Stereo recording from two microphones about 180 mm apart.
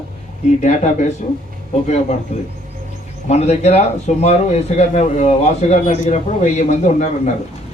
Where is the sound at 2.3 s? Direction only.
35° left (ahead or behind).